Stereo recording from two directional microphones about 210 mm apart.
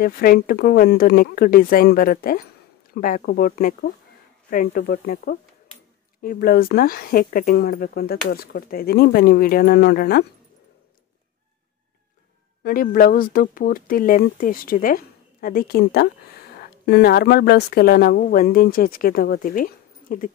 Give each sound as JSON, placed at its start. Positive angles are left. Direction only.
{"t": 0.0, "sound": "speech", "side_deg": 45}
{"t": 12.6, "sound": "speech", "side_deg": 45}